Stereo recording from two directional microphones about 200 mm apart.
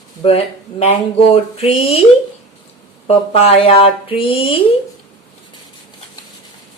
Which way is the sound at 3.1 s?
30° left (ahead or behind).